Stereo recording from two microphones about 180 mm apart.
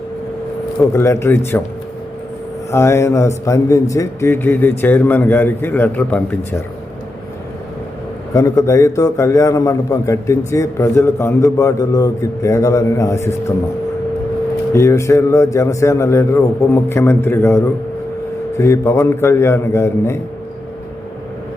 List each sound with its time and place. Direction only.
0.8 s a man's voice: 15° left (ahead or behind)
2.7 s a man's voice: 15° left (ahead or behind)
8.3 s a man's voice: 20° left (ahead or behind)
14.7 s a man's voice: 15° left (ahead or behind)